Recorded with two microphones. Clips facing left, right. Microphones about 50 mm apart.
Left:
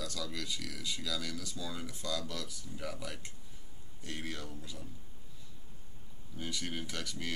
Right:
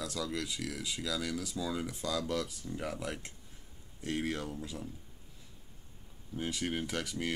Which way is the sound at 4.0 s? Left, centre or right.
Right.